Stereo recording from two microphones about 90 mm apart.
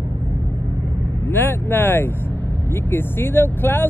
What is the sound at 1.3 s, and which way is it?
Speech, 20° left (ahead or behind).